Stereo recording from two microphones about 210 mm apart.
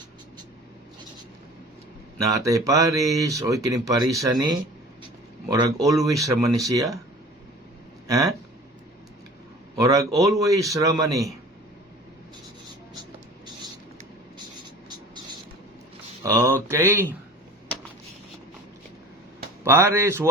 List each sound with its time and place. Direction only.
2.3 s speech: 15° right (ahead or behind)
8.0 s speech: 15° right (ahead or behind)
9.7 s speech: 15° right (ahead or behind)
12.6 s writing: 20° right (ahead or behind)
14.8 s a sound: 20° right (ahead or behind)
16.2 s speech: 10° right (ahead or behind)
19.6 s speech: 15° right (ahead or behind)